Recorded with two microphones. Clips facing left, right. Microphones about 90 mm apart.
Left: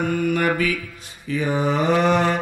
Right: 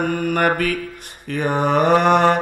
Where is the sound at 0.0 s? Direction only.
45° right (ahead or behind).